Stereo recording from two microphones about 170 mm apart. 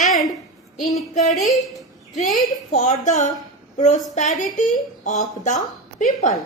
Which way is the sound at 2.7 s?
45° left (ahead or behind).